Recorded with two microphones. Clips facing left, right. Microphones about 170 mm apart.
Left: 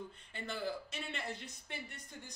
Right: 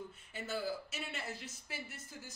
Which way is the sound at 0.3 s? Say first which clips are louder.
Right 1 dB; 5° right (ahead or behind).